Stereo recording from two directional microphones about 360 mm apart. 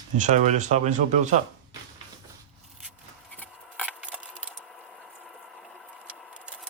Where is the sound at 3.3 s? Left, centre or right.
Centre.